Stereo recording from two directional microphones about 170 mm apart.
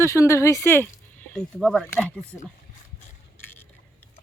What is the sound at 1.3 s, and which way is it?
Speech, centre (ahead or behind).